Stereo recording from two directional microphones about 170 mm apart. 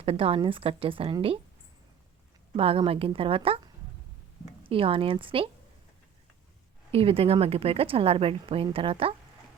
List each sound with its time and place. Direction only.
0.0 s a woman's voice: 35° right (ahead or behind)
2.6 s a woman's voice: 35° right (ahead or behind)
4.6 s a woman's voice: 35° right (ahead or behind)
6.9 s a woman's voice: 35° right (ahead or behind)